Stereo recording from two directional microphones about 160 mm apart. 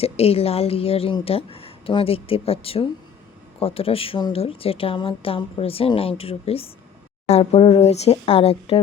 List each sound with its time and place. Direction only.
0.0 s speech: 40° left (ahead or behind)